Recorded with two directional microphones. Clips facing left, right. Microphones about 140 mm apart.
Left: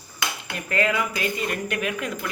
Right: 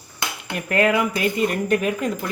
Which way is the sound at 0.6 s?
55° right (ahead or behind).